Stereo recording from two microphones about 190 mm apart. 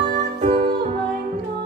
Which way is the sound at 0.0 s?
50° right (ahead or behind).